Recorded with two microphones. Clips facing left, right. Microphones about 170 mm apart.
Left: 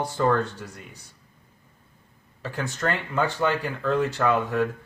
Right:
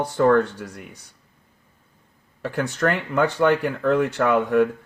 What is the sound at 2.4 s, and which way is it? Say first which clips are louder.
Speech: right 5 dB; 65° right (ahead or behind).